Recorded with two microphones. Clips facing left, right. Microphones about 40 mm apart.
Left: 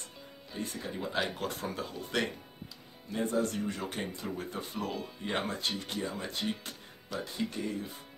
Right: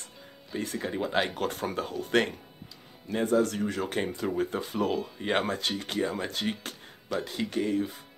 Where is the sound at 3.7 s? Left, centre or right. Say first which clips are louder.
Right 6 dB; right.